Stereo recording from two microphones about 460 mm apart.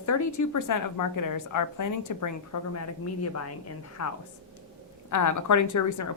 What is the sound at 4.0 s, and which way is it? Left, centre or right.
A woman's voice, left.